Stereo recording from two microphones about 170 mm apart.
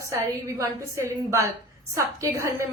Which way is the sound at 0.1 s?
15° right (ahead or behind).